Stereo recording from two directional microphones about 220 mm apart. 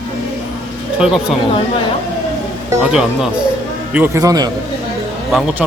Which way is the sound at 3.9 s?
10° right (ahead or behind).